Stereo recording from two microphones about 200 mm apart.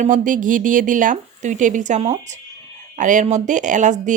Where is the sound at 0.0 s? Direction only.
40° right (ahead or behind).